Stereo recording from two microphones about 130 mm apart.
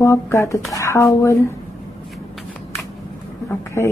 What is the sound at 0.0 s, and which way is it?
Speech, 25° left (ahead or behind).